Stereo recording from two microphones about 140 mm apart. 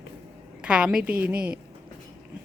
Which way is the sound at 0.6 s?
5° right (ahead or behind).